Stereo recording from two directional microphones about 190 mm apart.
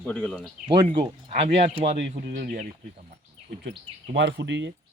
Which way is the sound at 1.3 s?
40° right (ahead or behind).